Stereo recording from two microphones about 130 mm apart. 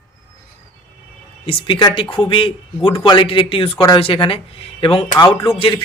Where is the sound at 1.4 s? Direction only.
40° left (ahead or behind).